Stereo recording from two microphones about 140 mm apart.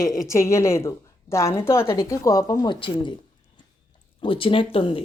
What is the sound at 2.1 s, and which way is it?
Speech, 25° left (ahead or behind).